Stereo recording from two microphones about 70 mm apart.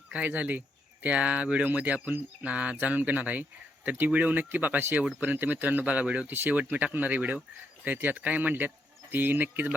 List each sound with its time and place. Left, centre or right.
0.1 s speech: centre
6.2 s speech: right